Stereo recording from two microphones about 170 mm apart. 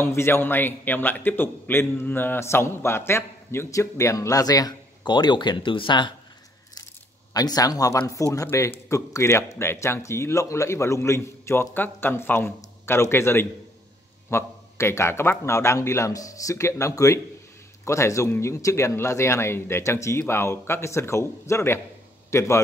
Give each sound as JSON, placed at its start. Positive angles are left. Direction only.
{"t": 0.0, "sound": "a man's voice", "side_deg": 15}
{"t": 7.3, "sound": "a man's voice", "side_deg": 20}